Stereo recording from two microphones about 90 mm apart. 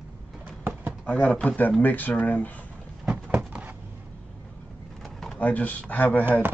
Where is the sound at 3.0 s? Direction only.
15° right (ahead or behind).